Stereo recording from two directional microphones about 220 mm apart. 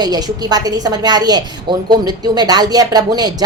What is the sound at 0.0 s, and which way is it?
A woman's voice, 20° right (ahead or behind).